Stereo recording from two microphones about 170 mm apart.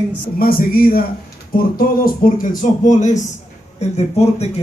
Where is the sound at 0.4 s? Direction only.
60° left (ahead or behind).